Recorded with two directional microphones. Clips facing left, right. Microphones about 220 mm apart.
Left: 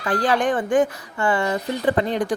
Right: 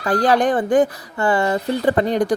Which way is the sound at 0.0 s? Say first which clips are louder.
Right 4 dB; 40° right (ahead or behind).